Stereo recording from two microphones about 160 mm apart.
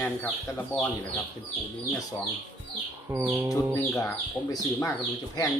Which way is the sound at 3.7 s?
20° left (ahead or behind).